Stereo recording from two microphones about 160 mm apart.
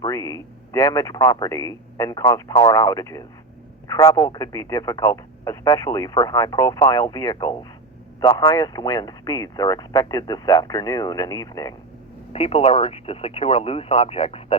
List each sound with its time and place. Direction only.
0.0 s a sound: 20° left (ahead or behind)
0.9 s speech: 20° left (ahead or behind)
12.3 s speech: 35° left (ahead or behind)